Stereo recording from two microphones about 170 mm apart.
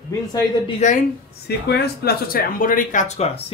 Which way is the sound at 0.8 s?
40° left (ahead or behind).